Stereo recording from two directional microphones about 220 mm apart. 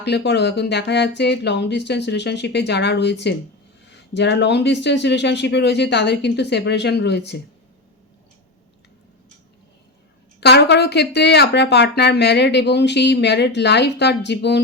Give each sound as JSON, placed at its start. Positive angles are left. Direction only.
{"t": 0.0, "sound": "speech", "side_deg": 50}
{"t": 10.4, "sound": "speech", "side_deg": 50}